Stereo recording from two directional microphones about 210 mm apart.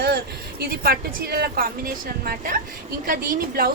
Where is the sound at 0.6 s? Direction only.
45° right (ahead or behind).